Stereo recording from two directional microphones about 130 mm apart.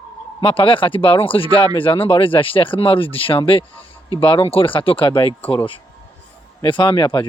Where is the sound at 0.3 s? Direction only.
45° left (ahead or behind).